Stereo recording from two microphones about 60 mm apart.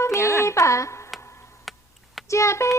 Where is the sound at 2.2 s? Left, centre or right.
Left.